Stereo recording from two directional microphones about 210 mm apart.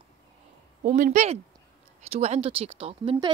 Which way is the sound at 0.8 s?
35° right (ahead or behind).